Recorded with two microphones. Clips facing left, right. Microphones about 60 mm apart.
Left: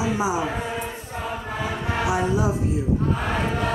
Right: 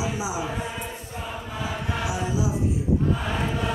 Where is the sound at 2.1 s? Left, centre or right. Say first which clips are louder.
Left 6 dB; left.